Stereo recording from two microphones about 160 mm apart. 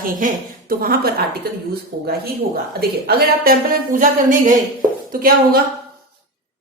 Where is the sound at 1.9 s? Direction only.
90° right.